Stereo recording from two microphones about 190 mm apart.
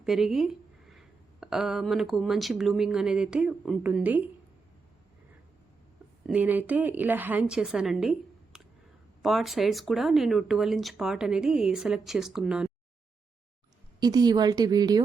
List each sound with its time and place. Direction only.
0.0 s speech: centre (ahead or behind)
6.2 s a woman's voice: 5° right (ahead or behind)
9.2 s speech: centre (ahead or behind)
14.0 s speech: 20° right (ahead or behind)